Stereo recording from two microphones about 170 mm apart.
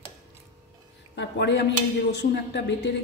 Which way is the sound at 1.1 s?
90° left.